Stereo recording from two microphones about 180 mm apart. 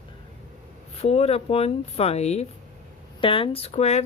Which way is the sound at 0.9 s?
35° left (ahead or behind).